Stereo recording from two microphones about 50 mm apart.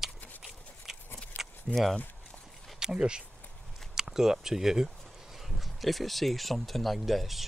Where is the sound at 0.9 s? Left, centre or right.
Centre.